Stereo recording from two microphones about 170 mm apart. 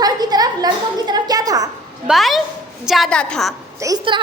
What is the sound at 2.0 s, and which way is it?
A woman's voice, centre (ahead or behind).